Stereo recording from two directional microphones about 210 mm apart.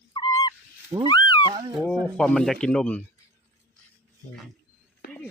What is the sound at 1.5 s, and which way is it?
Speech, 25° right (ahead or behind).